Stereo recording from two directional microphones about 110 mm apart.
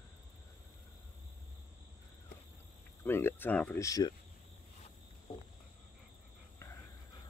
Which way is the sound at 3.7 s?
30° left (ahead or behind).